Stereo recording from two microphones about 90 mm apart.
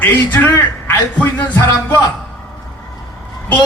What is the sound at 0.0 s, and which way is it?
Speech, 20° left (ahead or behind).